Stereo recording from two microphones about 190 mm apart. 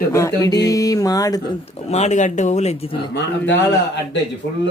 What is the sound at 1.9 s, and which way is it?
Speech, 35° left (ahead or behind).